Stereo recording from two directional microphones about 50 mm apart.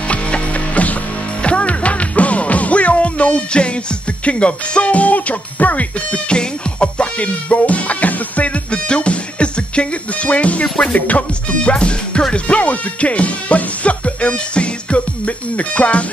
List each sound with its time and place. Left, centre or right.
0.1 s music: left
4.2 s speech: left